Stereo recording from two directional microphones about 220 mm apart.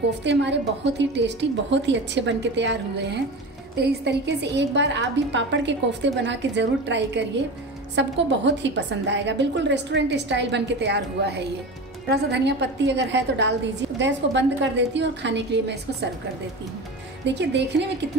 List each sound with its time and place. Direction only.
0.2 s a woman's voice: 55° right (ahead or behind)
17.2 s a woman's voice: 55° right (ahead or behind)